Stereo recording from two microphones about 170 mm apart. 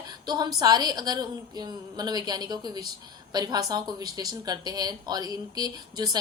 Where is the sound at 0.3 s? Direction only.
25° right (ahead or behind).